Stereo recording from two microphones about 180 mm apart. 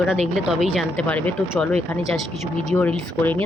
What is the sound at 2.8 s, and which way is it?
Speech, 10° left (ahead or behind).